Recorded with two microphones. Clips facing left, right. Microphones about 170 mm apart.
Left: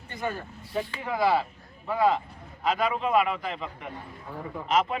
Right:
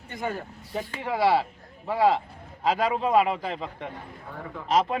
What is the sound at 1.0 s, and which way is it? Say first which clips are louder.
Speech: right 3 dB; 30° right (ahead or behind).